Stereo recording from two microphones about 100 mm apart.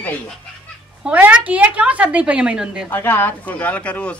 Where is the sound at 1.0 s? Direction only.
10° right (ahead or behind).